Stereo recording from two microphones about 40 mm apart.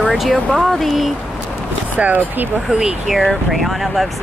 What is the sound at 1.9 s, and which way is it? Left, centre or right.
Speech, right.